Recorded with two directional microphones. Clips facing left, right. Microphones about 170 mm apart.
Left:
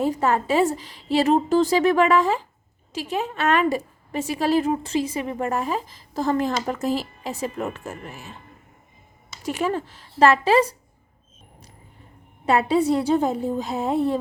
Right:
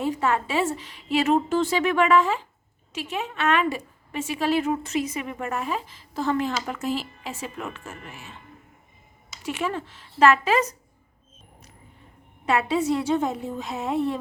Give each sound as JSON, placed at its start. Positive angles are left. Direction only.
{"t": 0.0, "sound": "a woman's voice", "side_deg": 40}
{"t": 9.4, "sound": "a woman's voice", "side_deg": 40}
{"t": 12.5, "sound": "a woman's voice", "side_deg": 35}